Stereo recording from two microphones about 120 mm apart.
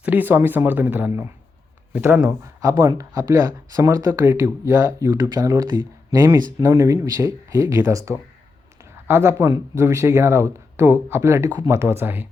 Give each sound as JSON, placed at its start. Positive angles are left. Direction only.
{"t": 0.0, "sound": "speech", "side_deg": -15}
{"t": 5.3, "sound": "speech", "side_deg": -35}